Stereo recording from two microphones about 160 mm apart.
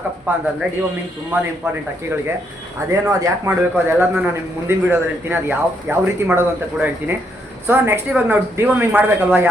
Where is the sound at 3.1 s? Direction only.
15° right (ahead or behind).